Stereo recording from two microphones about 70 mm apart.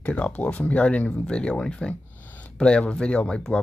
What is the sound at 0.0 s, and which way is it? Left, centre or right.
Speech, left.